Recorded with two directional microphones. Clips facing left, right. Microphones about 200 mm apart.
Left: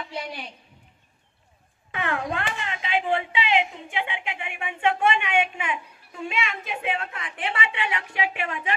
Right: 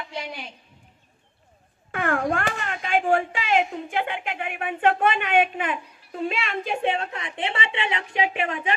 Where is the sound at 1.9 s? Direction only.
50° right (ahead or behind).